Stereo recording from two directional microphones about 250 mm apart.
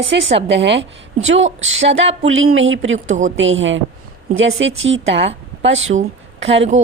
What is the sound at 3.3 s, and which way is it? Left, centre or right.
A woman's voice, right.